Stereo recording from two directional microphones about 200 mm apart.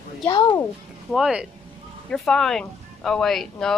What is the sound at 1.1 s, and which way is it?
A woman's voice, 5° right (ahead or behind).